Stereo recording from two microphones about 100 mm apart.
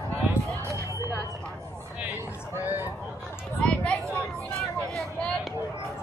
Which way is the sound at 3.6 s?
10° left (ahead or behind).